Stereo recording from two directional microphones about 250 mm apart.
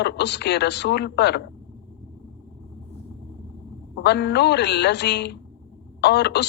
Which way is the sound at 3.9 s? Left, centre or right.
Left.